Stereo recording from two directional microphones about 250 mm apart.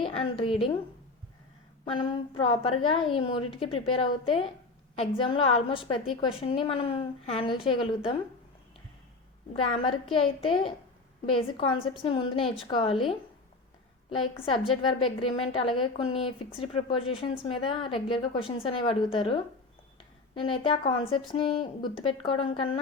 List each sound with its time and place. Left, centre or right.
0.0 s a woman's voice: left
1.8 s a woman's voice: left
9.5 s a woman's voice: left
14.1 s a woman's voice: left
15.8 s a woman's voice: left
20.4 s a woman's voice: centre